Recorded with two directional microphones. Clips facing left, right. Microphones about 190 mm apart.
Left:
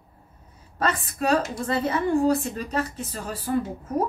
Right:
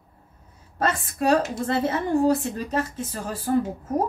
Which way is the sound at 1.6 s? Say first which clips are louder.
Even; 40° right (ahead or behind).